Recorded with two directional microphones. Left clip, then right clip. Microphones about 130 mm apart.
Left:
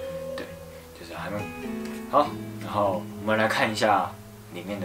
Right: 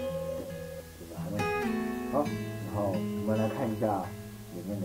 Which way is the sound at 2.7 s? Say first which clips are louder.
Left 7 dB; 25° right (ahead or behind).